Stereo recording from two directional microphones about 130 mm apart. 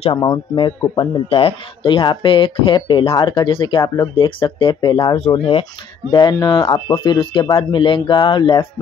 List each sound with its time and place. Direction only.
0.1 s speech: 35° left (ahead or behind)
3.8 s speech: 25° left (ahead or behind)
4.1 s speech: 40° left (ahead or behind)
6.3 s speech: 30° left (ahead or behind)